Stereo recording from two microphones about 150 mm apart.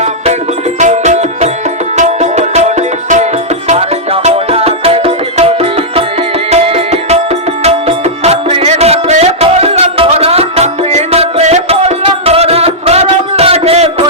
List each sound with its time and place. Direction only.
0.8 s music: 50° right (ahead or behind)